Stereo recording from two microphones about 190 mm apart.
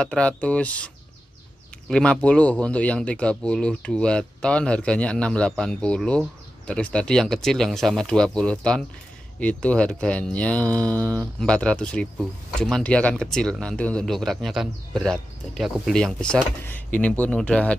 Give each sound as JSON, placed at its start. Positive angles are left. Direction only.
{"t": 0.0, "sound": "speech", "side_deg": 5}
{"t": 11.0, "sound": "speech", "side_deg": -20}
{"t": 11.3, "sound": "speech", "side_deg": 5}